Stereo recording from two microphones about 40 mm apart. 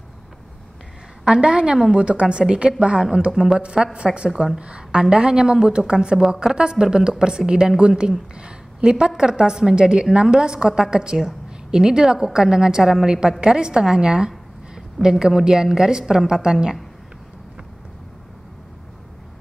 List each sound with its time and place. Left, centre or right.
1.2 s a woman's voice: right